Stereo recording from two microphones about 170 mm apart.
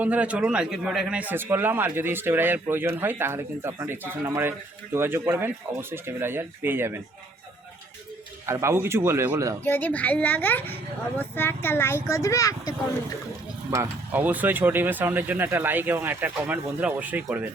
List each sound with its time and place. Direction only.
0.0 s a man's voice: 10° right (ahead or behind)
8.4 s a man's voice: 15° right (ahead or behind)
9.6 s a child's voice: 10° left (ahead or behind)
13.7 s a man's voice: 15° right (ahead or behind)